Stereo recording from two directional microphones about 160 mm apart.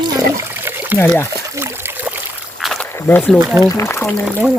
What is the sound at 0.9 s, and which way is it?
Speech, 15° left (ahead or behind).